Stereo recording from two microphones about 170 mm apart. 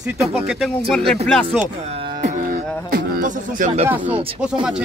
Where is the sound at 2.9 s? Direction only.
55° right (ahead or behind).